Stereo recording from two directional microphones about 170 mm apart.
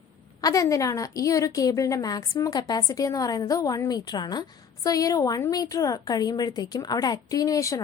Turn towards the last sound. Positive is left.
turn(degrees=20)  # may be behind; listen again after turning